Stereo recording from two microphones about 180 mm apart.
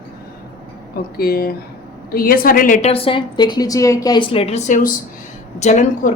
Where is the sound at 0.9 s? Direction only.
55° left (ahead or behind).